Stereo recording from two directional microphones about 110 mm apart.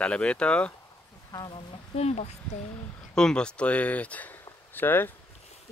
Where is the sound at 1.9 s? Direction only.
75° left (ahead or behind).